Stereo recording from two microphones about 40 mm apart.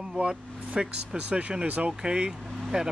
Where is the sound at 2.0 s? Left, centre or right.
Right.